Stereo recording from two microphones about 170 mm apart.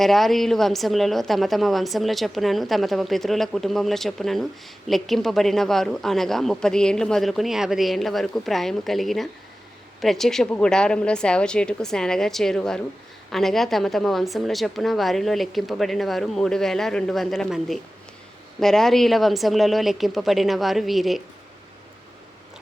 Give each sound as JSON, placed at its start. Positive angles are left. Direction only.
{"t": 0.0, "sound": "a woman's voice", "side_deg": 0}